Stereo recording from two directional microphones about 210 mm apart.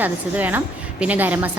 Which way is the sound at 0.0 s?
10° right (ahead or behind).